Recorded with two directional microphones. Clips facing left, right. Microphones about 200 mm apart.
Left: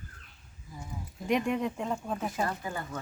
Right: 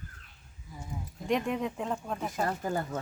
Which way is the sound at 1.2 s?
Centre (ahead or behind).